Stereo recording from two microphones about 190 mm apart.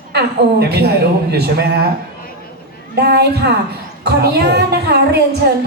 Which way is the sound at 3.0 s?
55° right (ahead or behind).